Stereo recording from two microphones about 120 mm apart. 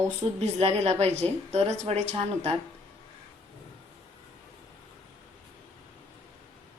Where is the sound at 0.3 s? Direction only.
60° right (ahead or behind).